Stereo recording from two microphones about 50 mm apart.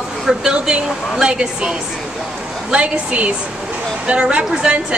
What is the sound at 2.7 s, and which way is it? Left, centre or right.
A woman's voice, right.